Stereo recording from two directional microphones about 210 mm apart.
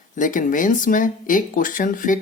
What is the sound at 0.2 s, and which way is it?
Speech, 40° left (ahead or behind).